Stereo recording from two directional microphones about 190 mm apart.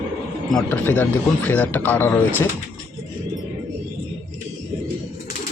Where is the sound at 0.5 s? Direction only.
10° left (ahead or behind).